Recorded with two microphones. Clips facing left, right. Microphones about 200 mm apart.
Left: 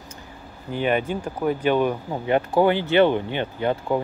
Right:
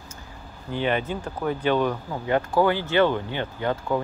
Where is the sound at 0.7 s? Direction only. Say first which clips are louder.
Left 2 dB; 15° left (ahead or behind).